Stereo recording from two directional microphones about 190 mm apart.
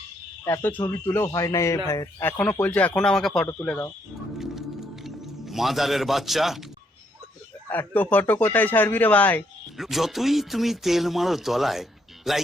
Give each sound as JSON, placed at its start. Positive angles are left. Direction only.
{"t": 0.4, "sound": "speech", "side_deg": 10}
{"t": 4.4, "sound": "music", "side_deg": 0}
{"t": 7.7, "sound": "speech", "side_deg": 10}